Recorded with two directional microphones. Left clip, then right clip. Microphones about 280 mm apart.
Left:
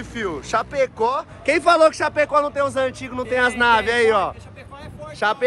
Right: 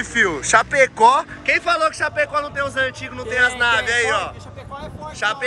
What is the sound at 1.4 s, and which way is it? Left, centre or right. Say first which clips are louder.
A man's voice: left 8 dB; centre.